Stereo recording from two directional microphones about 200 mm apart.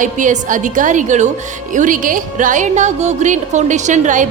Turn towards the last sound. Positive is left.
turn(degrees=-40)  # may be behind; listen again after turning